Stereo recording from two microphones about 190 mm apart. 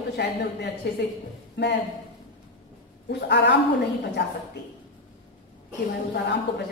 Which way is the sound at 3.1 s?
65° left (ahead or behind).